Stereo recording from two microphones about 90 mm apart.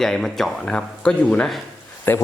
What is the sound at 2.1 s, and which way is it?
Speech, 20° left (ahead or behind).